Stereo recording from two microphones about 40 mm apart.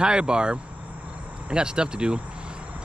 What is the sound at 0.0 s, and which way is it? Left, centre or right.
Speech, right.